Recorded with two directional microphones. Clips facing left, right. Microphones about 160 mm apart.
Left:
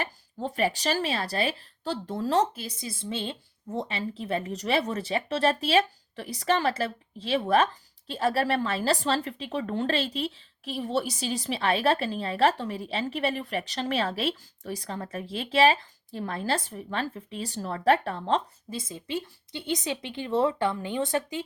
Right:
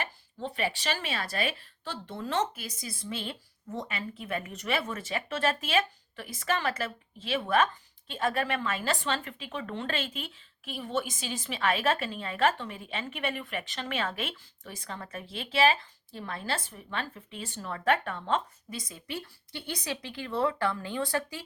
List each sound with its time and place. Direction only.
0.0 s speech: 40° left (ahead or behind); by 21.4 s 20° left (ahead or behind)